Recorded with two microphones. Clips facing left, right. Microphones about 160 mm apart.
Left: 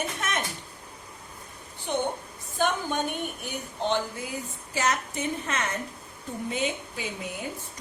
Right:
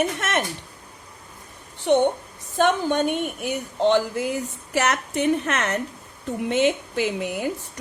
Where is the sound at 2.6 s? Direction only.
70° right (ahead or behind).